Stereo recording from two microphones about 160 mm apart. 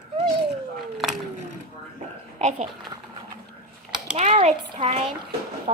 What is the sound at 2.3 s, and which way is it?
Speech, 45° right (ahead or behind).